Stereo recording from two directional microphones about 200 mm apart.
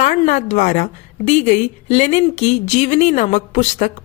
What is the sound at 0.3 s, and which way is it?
Speech, 35° left (ahead or behind).